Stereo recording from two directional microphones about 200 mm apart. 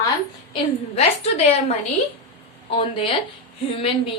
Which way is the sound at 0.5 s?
30° left (ahead or behind).